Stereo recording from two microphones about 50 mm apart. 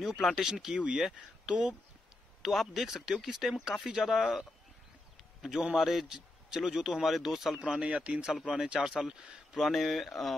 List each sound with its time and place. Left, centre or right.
0.0 s a man's voice: centre
7.5 s speech: right
8.3 s a man's voice: centre